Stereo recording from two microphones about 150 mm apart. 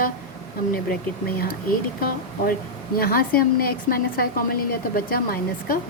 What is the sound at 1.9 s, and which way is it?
A woman's voice, 75° left (ahead or behind).